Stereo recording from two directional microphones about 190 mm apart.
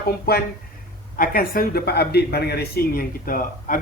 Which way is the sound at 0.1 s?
55° left (ahead or behind).